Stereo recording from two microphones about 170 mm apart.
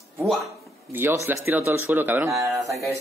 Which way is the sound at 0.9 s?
15° right (ahead or behind).